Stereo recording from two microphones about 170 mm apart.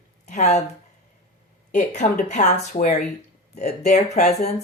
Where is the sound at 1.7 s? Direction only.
45° left (ahead or behind).